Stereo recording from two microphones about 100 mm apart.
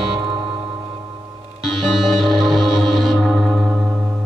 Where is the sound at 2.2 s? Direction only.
Centre (ahead or behind).